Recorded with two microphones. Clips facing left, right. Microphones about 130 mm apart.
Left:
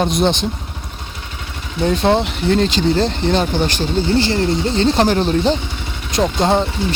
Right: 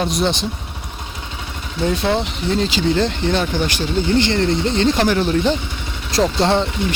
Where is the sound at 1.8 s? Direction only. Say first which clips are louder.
Left 4 dB; 50° left (ahead or behind).